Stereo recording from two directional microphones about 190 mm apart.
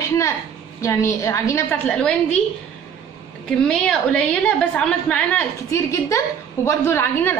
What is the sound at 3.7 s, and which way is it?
A woman's voice, 5° left (ahead or behind).